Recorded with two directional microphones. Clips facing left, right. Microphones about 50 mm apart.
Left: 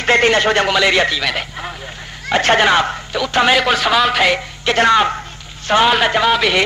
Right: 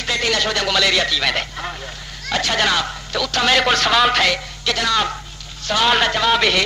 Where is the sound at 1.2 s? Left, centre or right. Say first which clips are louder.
Even; centre.